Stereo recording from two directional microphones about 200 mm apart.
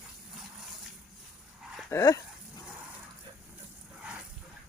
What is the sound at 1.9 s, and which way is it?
Speech, 15° left (ahead or behind).